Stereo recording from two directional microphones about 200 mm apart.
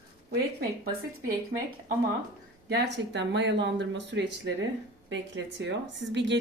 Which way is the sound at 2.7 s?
60° right (ahead or behind).